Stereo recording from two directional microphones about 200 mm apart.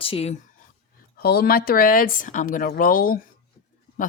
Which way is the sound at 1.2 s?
50° left (ahead or behind).